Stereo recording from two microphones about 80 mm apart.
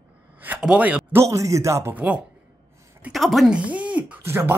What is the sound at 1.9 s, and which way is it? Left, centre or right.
Speech, centre.